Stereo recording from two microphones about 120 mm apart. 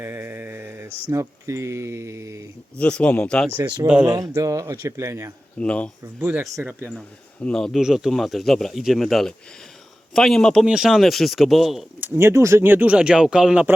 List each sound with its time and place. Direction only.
0.0 s speech: 20° right (ahead or behind)
2.7 s speech: 10° left (ahead or behind)
3.6 s speech: 35° right (ahead or behind)
3.8 s speech: 10° right (ahead or behind)
4.1 s speech: 30° right (ahead or behind)
5.5 s speech: 10° left (ahead or behind)
6.1 s speech: 15° right (ahead or behind)
7.4 s speech: 5° left (ahead or behind)
11.9 s speech: 20° right (ahead or behind)